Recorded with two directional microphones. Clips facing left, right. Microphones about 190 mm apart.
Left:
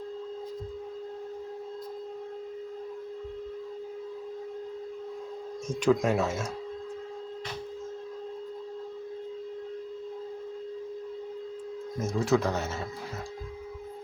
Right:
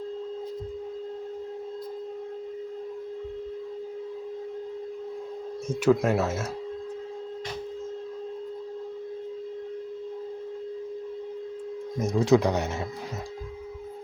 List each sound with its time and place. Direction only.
5.6 s speech: 5° right (ahead or behind)
11.9 s speech: 15° right (ahead or behind)